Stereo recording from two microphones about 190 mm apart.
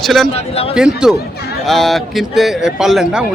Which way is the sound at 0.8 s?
5° right (ahead or behind).